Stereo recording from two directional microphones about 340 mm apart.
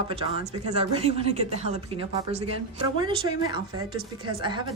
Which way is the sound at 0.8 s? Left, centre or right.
Centre.